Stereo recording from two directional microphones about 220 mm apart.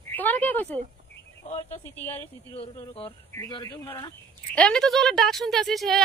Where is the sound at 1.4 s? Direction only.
30° left (ahead or behind); by 6.0 s centre (ahead or behind).